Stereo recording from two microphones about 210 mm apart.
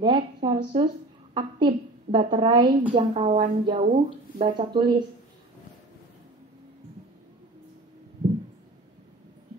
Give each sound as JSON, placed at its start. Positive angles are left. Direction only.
{"t": 0.0, "sound": "a woman's voice", "side_deg": -25}